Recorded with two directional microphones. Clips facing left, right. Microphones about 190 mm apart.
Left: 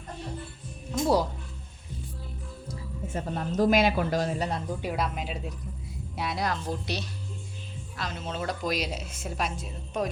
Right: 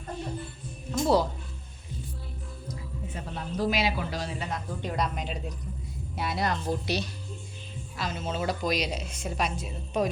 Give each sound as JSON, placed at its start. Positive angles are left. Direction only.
{"t": 0.9, "sound": "music", "side_deg": 10}
{"t": 3.1, "sound": "a man's voice", "side_deg": 45}
{"t": 4.8, "sound": "speech", "side_deg": 5}